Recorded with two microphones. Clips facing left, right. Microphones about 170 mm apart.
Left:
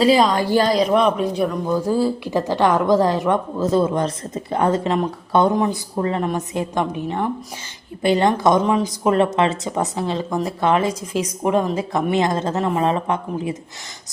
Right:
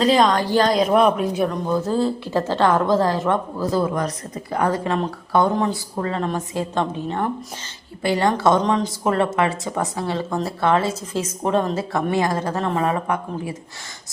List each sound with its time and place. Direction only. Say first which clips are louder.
0.0 s speech: left 1 dB; 5° left (ahead or behind)
0.7 s speech: even; centre (ahead or behind)
1.7 s speech: left 3 dB; 10° left (ahead or behind)